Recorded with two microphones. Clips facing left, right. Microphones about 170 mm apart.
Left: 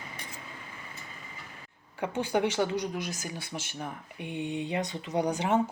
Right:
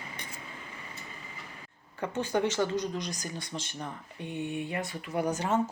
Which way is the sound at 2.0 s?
10° left (ahead or behind).